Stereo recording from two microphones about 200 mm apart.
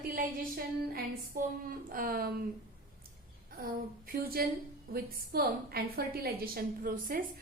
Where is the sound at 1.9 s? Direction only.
45° right (ahead or behind).